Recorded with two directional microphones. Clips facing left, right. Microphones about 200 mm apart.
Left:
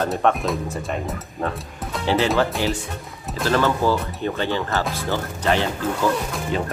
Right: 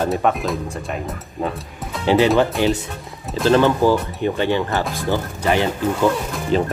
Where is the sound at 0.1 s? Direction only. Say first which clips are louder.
Right 1 dB; centre (ahead or behind).